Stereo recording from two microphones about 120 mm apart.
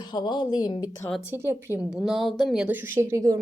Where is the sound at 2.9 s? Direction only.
25° right (ahead or behind).